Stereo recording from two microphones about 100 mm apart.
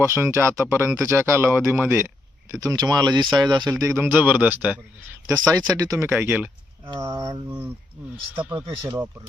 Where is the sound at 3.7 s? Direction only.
35° right (ahead or behind).